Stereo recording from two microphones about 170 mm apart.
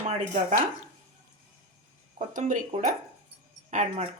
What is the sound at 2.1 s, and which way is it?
Speech, 50° right (ahead or behind).